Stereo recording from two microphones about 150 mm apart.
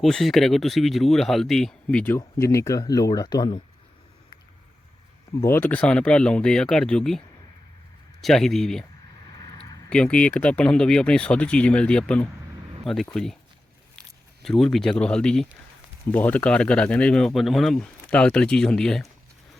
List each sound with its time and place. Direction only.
0.0 s speech: centre (ahead or behind)
2.1 s speech: 20° left (ahead or behind)
5.4 s speech: 15° left (ahead or behind)
8.2 s speech: centre (ahead or behind)
9.4 s a sound: 25° left (ahead or behind)
9.9 s speech: 5° left (ahead or behind)
14.4 s speech: centre (ahead or behind)